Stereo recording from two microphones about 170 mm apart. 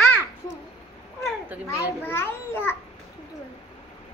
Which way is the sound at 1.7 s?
10° left (ahead or behind).